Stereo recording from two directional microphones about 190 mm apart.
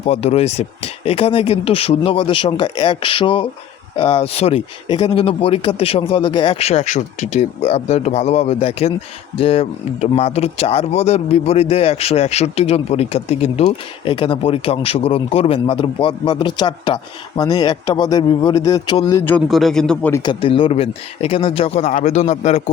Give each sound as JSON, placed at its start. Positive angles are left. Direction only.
{"t": 0.0, "sound": "speech", "side_deg": 35}
{"t": 19.5, "sound": "speech", "side_deg": 0}
{"t": 20.2, "sound": "speech", "side_deg": 30}